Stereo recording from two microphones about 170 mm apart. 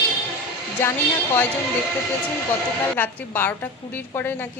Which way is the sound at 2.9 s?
10° left (ahead or behind).